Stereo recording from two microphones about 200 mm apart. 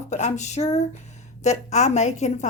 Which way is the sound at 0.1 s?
35° left (ahead or behind).